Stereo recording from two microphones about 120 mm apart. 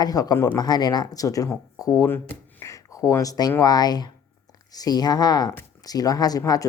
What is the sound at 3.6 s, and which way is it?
A woman's voice, 35° left (ahead or behind).